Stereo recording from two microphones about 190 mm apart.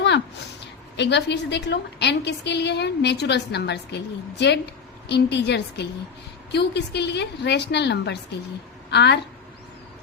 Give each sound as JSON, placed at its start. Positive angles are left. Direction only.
{"t": 0.6, "sound": "a woman's voice", "side_deg": 65}